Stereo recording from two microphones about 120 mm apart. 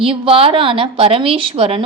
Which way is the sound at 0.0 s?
50° right (ahead or behind).